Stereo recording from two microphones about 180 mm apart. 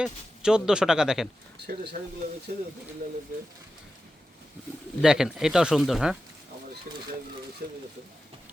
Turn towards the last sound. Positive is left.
turn(degrees=-55)  # may be behind; listen again after turning